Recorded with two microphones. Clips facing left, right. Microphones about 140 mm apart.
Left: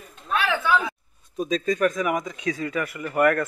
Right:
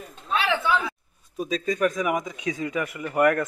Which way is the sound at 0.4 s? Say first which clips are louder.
Left 1 dB; 25° right (ahead or behind).